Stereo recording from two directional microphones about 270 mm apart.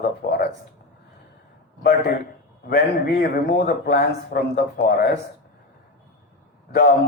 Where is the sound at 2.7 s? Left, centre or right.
Left.